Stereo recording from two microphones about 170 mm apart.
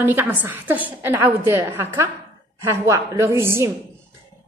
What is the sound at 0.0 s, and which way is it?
A woman's voice, 10° right (ahead or behind).